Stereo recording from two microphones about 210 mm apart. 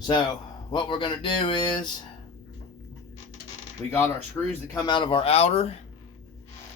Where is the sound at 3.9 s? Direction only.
10° left (ahead or behind); by 5.7 s 30° left (ahead or behind).